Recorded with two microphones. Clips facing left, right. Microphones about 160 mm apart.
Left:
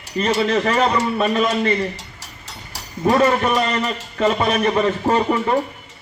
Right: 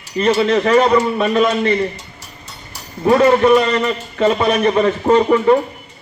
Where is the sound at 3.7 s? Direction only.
30° right (ahead or behind).